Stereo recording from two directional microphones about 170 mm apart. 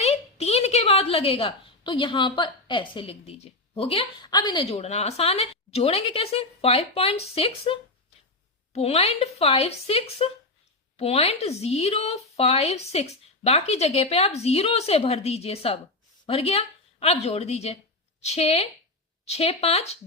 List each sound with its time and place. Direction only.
0.0 s a woman's voice: 40° left (ahead or behind)
4.6 s a woman's voice: 40° left (ahead or behind)